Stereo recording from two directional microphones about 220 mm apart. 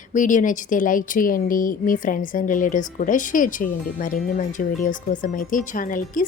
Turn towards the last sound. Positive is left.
turn(degrees=40)  # may be behind; listen again after turning